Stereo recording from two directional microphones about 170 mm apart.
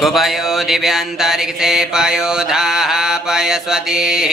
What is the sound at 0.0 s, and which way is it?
Mantra, centre (ahead or behind).